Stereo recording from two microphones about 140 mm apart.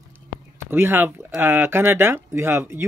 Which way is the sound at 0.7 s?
15° right (ahead or behind).